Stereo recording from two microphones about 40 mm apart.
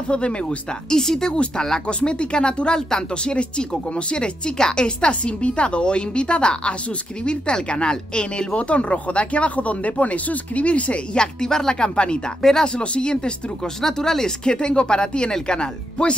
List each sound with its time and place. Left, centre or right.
0.1 s speech: left
0.9 s speech: centre
8.5 s speech: left
11.1 s speech: centre
12.4 s speech: centre
12.6 s speech: left
13.7 s speech: centre